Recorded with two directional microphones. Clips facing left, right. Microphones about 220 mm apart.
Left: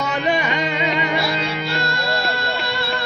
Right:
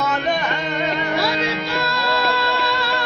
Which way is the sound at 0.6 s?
90° left.